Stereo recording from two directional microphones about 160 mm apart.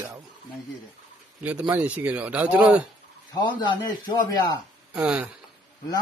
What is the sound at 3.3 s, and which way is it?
A man's voice, 30° left (ahead or behind).